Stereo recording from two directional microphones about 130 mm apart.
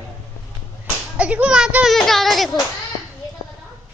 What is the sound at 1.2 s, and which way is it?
A child's voice, 10° right (ahead or behind).